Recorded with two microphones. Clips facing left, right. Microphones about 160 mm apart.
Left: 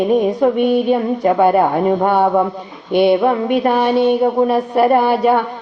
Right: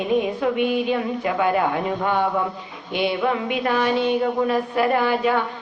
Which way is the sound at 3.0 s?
50° left (ahead or behind).